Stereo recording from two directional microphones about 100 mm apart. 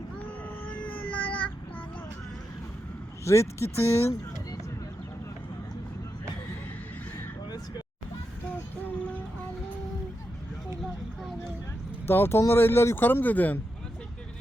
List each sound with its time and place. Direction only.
0.7 s child singing: 15° left (ahead or behind)
3.2 s speech: 30° left (ahead or behind)
12.0 s speech: 20° left (ahead or behind)